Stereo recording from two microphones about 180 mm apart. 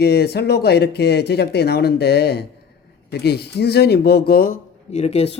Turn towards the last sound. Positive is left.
turn(degrees=35)  # may be behind; listen again after turning